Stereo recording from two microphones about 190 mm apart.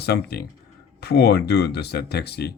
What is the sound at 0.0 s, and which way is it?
Speech, 60° left (ahead or behind).